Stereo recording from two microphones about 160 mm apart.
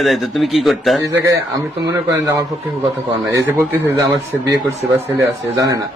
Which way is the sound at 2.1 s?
20° right (ahead or behind).